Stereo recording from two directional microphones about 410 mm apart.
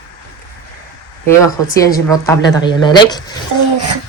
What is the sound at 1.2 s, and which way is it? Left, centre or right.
A woman's voice, centre.